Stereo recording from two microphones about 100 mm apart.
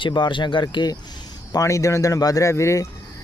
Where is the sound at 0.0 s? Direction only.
50° left (ahead or behind).